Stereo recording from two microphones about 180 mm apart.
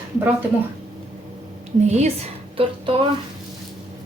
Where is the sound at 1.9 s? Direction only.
40° right (ahead or behind).